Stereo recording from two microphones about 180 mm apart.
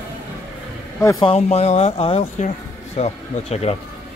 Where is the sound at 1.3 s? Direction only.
35° left (ahead or behind).